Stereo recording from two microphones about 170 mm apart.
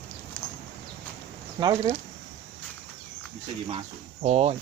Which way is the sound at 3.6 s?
35° right (ahead or behind).